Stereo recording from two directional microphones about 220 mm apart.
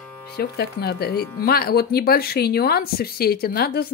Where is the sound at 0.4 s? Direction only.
45° left (ahead or behind).